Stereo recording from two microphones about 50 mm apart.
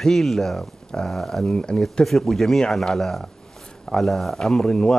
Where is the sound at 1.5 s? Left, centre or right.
Centre.